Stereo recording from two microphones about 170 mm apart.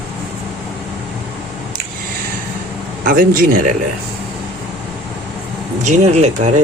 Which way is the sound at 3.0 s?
55° right (ahead or behind).